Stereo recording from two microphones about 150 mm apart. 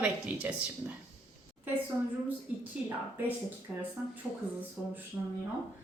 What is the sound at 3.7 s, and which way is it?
A woman's voice, 10° right (ahead or behind).